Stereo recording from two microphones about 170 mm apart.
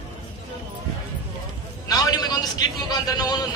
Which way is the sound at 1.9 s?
20° left (ahead or behind).